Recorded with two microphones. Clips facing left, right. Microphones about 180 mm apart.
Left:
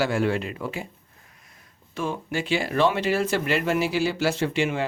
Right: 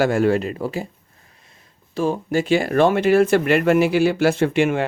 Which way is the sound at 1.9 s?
40° right (ahead or behind).